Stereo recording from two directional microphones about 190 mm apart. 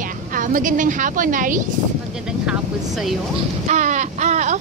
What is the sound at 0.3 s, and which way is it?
Speech, 45° right (ahead or behind).